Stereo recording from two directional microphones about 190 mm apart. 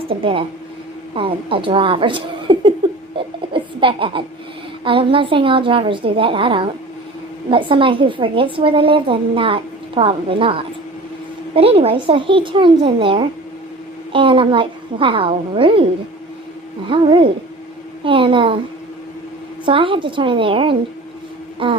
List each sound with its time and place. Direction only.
0.1 s a woman's voice: 25° right (ahead or behind)
3.2 s a sound: 25° right (ahead or behind)
4.8 s a woman's voice: 25° right (ahead or behind)
16.9 s a woman's voice: 25° right (ahead or behind)
19.6 s a woman's voice: 25° right (ahead or behind)